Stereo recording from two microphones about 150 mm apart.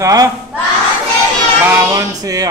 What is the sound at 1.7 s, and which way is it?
Music, 20° right (ahead or behind).